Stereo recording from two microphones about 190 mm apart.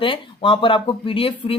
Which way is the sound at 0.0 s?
25° left (ahead or behind).